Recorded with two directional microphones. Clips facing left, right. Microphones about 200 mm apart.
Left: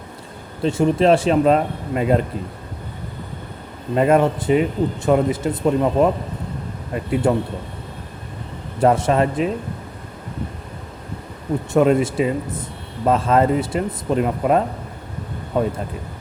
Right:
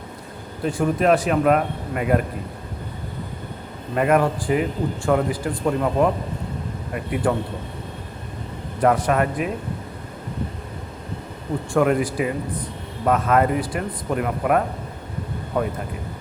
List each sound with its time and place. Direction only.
0.6 s a man's voice: 25° left (ahead or behind)
3.9 s a man's voice: 25° left (ahead or behind)
8.8 s a man's voice: 25° left (ahead or behind)
11.7 s a man's voice: 20° left (ahead or behind)